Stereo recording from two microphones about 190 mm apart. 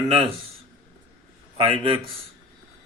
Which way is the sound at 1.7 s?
30° right (ahead or behind).